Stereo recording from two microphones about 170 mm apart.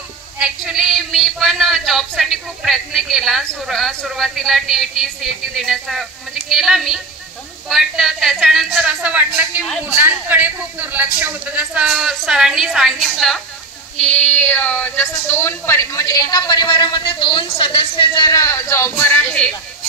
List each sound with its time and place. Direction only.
0.4 s a woman's voice: 5° right (ahead or behind)